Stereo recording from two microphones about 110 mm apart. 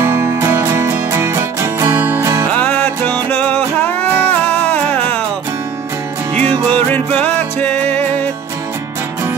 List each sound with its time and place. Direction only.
0.0 s music: 25° right (ahead or behind)
2.5 s music: 15° left (ahead or behind)
6.3 s music: 65° right (ahead or behind)
6.7 s music: 10° left (ahead or behind)